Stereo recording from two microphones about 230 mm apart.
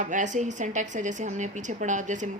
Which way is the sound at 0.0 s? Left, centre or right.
Right.